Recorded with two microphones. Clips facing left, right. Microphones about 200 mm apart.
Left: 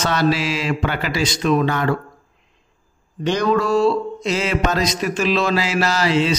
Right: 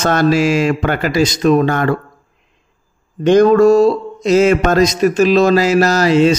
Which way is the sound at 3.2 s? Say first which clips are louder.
Right 10 dB; 50° right (ahead or behind).